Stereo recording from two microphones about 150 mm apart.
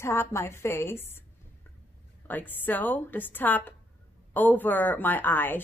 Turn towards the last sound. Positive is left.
turn(degrees=15)  # may be behind; listen again after turning